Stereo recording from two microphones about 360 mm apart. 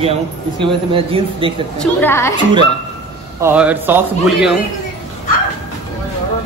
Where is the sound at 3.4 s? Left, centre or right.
Centre.